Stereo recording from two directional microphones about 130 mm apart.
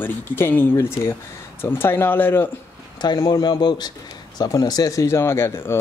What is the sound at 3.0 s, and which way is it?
Speech, 30° left (ahead or behind).